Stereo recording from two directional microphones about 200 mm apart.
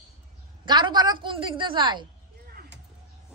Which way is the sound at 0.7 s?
20° right (ahead or behind).